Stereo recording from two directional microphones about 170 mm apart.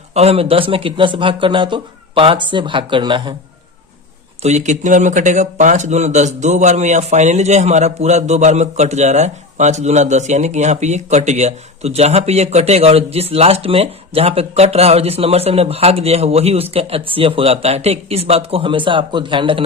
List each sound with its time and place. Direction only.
0.1 s speech: 40° right (ahead or behind)
4.4 s speech: 45° right (ahead or behind)